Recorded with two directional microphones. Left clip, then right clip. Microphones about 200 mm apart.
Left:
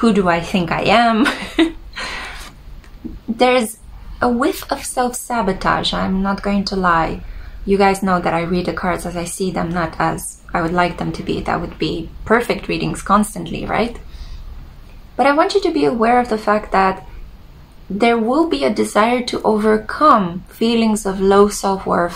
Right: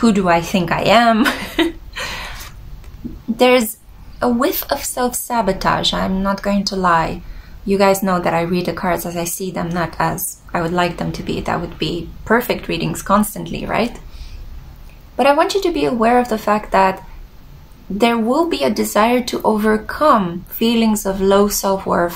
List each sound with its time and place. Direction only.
0.0 s speech: 5° right (ahead or behind)
3.3 s a woman's voice: 5° right (ahead or behind)
15.1 s a woman's voice: 5° right (ahead or behind)
17.9 s speech: 5° right (ahead or behind)